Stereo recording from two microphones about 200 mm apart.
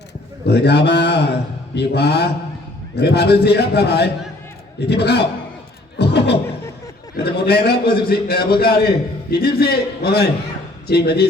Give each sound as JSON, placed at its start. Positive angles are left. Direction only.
{"t": 0.4, "sound": "a man's voice", "side_deg": 55}
{"t": 6.0, "sound": "beatboxing", "side_deg": 55}
{"t": 7.2, "sound": "a man's voice", "side_deg": 55}